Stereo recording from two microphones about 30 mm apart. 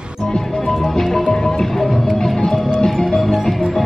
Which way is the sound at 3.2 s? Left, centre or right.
Centre.